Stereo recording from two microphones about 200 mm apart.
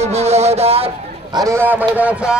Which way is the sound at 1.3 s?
15° right (ahead or behind).